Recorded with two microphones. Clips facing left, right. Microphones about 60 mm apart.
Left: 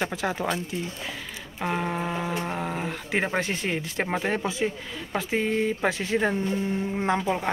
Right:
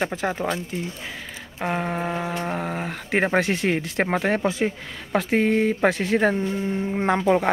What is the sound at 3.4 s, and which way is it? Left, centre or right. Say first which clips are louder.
Speech: right 6 dB; right.